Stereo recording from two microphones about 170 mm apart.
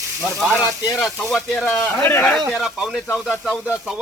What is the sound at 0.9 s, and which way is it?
Speech, centre (ahead or behind).